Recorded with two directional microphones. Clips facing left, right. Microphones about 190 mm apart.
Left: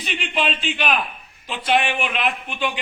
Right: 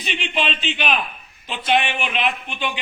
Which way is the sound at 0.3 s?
5° left (ahead or behind).